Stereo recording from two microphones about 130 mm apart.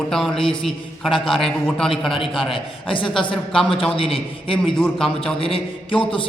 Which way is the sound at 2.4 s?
45° left (ahead or behind).